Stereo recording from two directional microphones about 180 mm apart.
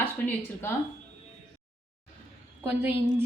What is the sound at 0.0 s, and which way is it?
Speech, 10° left (ahead or behind).